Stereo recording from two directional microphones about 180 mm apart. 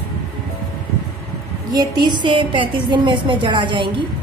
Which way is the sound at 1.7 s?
25° right (ahead or behind).